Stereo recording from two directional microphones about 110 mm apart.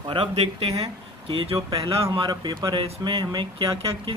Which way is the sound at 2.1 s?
45° right (ahead or behind).